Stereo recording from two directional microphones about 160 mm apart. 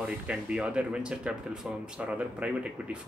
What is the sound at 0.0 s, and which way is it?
A man's voice, 5° right (ahead or behind).